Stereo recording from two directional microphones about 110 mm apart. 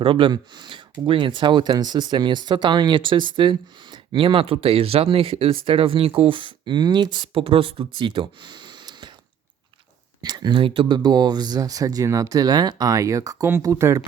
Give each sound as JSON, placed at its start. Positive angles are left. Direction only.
{"t": 0.0, "sound": "speech", "side_deg": -55}
{"t": 10.2, "sound": "speech", "side_deg": -40}